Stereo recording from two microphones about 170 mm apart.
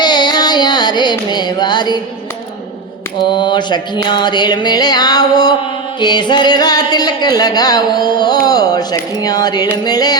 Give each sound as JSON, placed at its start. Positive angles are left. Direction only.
{"t": 0.0, "sound": "carnatic music", "side_deg": 25}
{"t": 3.2, "sound": "speech", "side_deg": 25}